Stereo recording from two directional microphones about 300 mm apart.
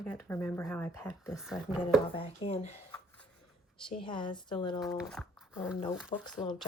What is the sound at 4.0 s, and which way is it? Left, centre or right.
Speech, centre.